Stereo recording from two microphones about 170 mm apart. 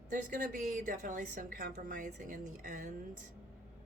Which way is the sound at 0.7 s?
50° right (ahead or behind).